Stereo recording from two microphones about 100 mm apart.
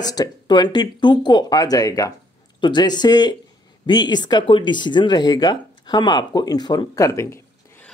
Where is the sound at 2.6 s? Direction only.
45° left (ahead or behind).